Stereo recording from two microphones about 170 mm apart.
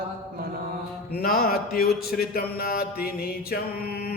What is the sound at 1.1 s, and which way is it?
Speech, 65° left (ahead or behind).